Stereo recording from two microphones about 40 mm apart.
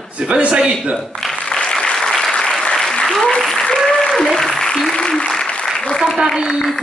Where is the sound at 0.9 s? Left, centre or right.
Centre.